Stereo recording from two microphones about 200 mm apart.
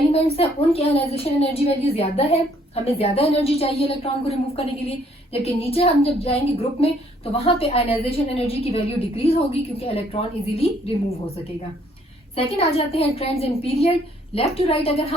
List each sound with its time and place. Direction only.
0.1 s a woman's voice: 30° left (ahead or behind)
12.7 s a woman's voice: 30° left (ahead or behind)